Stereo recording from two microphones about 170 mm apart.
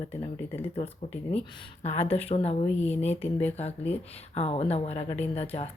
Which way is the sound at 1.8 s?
40° left (ahead or behind).